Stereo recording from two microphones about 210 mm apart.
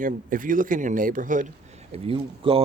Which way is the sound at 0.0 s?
40° right (ahead or behind).